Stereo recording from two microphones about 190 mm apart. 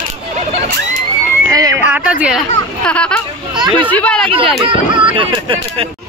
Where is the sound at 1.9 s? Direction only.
10° right (ahead or behind).